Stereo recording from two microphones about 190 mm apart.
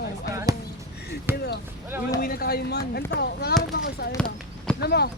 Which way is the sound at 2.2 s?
50° left (ahead or behind).